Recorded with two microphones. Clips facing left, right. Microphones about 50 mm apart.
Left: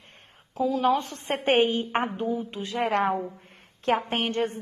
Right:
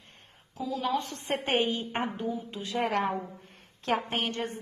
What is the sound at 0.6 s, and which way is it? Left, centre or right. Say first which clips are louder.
A woman's voice: left 7 dB; left.